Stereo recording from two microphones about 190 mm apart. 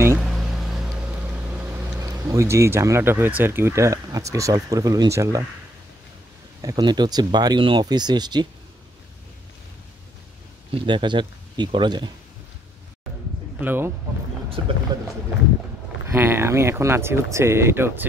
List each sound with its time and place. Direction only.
0.2 s a sound: centre (ahead or behind)
2.0 s speech: 20° right (ahead or behind)
6.6 s speech: 20° right (ahead or behind)
10.7 s speech: 25° right (ahead or behind)
13.6 s speech: 10° right (ahead or behind)
14.6 s speech: 25° right (ahead or behind)
16.1 s speech: 10° right (ahead or behind)